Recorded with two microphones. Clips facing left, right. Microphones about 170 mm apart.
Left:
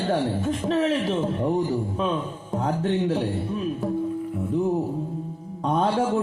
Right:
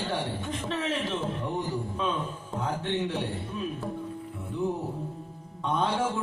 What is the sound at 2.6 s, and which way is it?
Speech, 40° left (ahead or behind).